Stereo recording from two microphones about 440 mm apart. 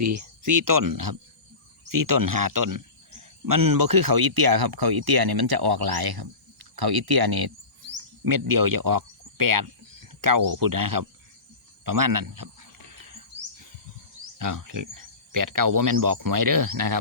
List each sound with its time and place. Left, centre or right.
0.0 s speech: right
14.3 s speech: right